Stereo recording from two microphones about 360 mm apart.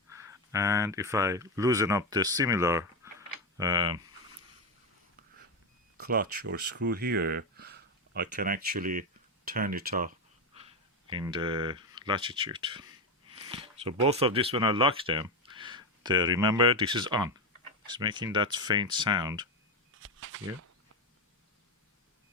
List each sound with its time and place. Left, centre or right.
0.1 s speech: centre
6.0 s speech: right
20.0 s a sound: right